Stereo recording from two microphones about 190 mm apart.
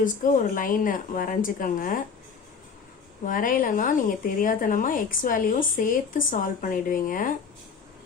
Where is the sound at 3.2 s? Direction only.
45° left (ahead or behind).